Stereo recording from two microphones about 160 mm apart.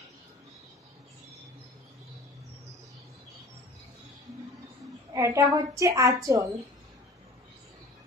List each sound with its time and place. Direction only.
5.1 s a woman's voice: 20° right (ahead or behind)